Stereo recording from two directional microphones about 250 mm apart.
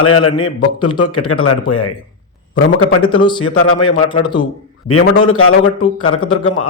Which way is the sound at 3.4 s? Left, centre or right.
Left.